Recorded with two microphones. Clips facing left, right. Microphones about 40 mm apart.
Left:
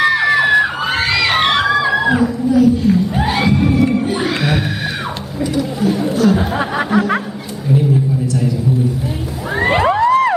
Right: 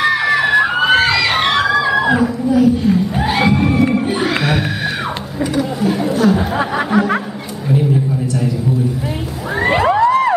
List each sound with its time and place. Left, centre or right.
0.0 s crowd: centre
2.0 s a sound: centre
3.2 s crowd: centre
4.2 s music: centre
5.5 s chatter: centre
6.2 s speech: centre
9.5 s music: centre